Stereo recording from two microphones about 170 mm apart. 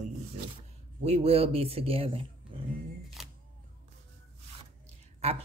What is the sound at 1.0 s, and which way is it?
Speech, 35° right (ahead or behind).